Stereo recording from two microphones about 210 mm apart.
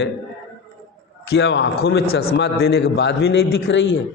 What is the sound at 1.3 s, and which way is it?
A man's voice, 60° left (ahead or behind).